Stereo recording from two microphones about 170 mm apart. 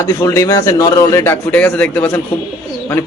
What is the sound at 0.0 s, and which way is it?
A man's voice, 15° left (ahead or behind).